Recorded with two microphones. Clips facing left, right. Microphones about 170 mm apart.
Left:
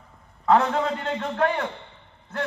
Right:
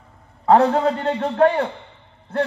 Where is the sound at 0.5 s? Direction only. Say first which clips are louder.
Right 5 dB; 35° right (ahead or behind).